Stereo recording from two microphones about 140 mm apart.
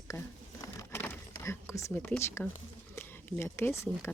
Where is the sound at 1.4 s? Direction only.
20° left (ahead or behind).